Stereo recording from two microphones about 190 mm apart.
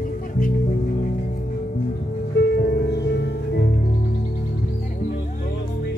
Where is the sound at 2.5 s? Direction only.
55° left (ahead or behind).